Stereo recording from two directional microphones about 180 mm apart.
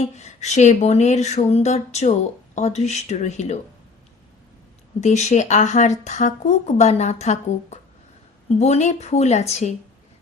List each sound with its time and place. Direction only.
0.0 s speech: 40° left (ahead or behind)
4.9 s speech: 40° left (ahead or behind)